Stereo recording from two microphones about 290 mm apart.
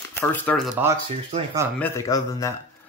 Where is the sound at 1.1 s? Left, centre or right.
Right.